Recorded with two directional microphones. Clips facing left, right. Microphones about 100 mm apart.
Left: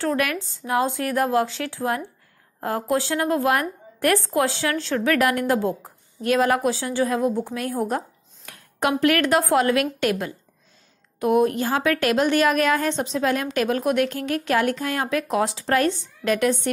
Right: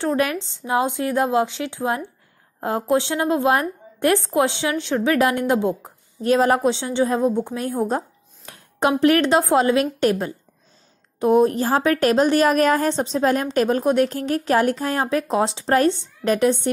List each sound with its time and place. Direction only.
0.0 s a woman's voice: 25° right (ahead or behind)